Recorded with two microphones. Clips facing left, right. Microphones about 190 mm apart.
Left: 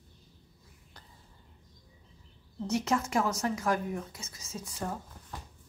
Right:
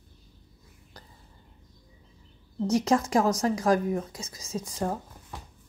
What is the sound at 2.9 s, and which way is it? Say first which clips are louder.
Speech: right 6 dB; 35° right (ahead or behind).